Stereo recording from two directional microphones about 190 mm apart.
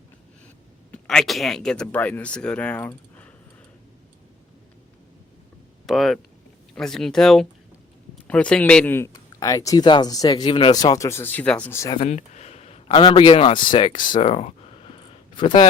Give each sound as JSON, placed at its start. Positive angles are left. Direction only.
{"t": 0.9, "sound": "speech", "side_deg": 5}
{"t": 5.8, "sound": "speech", "side_deg": 0}
{"t": 11.9, "sound": "speech", "side_deg": 35}
{"t": 14.9, "sound": "a sound", "side_deg": 25}